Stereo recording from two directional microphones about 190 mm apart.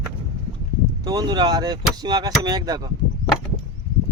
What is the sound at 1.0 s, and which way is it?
Speech, 20° right (ahead or behind).